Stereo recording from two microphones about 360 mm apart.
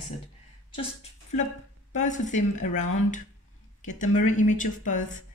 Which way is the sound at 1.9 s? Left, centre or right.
Centre.